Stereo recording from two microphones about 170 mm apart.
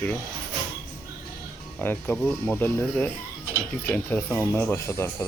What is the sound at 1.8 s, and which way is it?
Speech, 10° left (ahead or behind).